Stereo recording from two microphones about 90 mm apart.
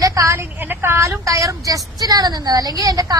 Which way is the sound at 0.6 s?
25° right (ahead or behind).